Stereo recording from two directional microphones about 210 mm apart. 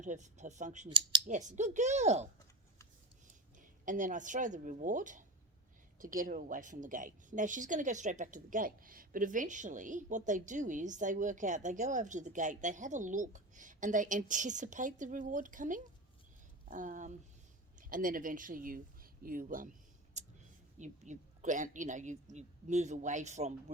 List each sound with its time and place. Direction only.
0.0 s a woman's voice: 35° right (ahead or behind)
0.9 s speech: 25° right (ahead or behind)
1.3 s a woman's voice: 35° right (ahead or behind)
3.6 s a woman's voice: 40° right (ahead or behind)
20.1 s a sound: 35° right (ahead or behind)
20.7 s a woman's voice: 35° right (ahead or behind)